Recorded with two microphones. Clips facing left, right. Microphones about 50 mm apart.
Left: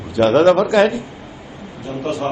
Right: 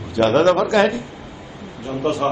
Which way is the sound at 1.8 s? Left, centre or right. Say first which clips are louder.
Right 2 dB; right.